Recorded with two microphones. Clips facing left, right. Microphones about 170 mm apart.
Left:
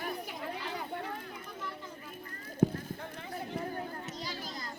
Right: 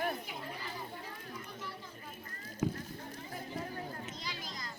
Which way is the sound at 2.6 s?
45° left (ahead or behind).